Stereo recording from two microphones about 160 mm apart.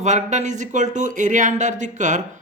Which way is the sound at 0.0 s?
50° right (ahead or behind).